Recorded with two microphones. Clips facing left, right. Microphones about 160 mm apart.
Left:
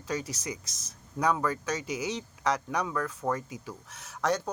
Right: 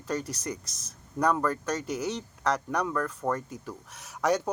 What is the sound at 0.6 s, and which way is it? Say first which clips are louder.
Speech: right 1 dB; 90° left.